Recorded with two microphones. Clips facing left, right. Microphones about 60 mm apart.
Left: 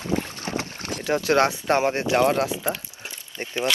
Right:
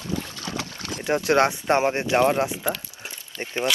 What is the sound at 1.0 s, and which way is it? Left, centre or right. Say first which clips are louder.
Speech: even; right.